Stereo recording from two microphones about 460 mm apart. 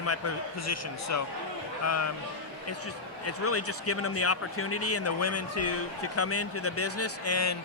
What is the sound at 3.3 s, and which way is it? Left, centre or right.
Speech, left.